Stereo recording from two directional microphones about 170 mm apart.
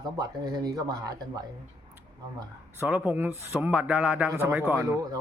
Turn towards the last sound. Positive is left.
turn(degrees=-15)  # may be behind; listen again after turning